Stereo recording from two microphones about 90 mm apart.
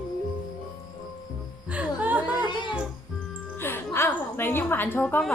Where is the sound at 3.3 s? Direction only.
25° left (ahead or behind).